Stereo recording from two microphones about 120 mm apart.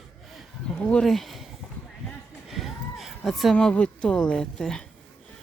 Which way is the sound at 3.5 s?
10° left (ahead or behind).